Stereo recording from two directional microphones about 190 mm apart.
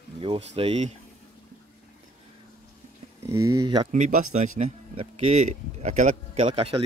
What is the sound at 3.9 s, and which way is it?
Speech, 40° right (ahead or behind).